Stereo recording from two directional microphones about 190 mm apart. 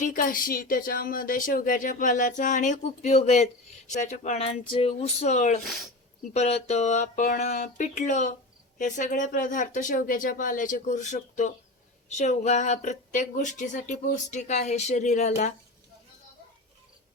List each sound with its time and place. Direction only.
0.0 s speech: 45° left (ahead or behind)
5.6 s speech: centre (ahead or behind)
6.3 s speech: 35° left (ahead or behind)